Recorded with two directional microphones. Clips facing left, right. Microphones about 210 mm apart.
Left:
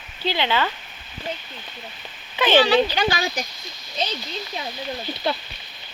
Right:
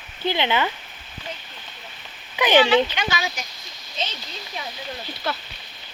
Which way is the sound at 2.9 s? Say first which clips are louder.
Left 4 dB; 35° left (ahead or behind).